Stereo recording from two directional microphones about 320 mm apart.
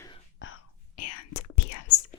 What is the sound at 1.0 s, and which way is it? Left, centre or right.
Whispering, left.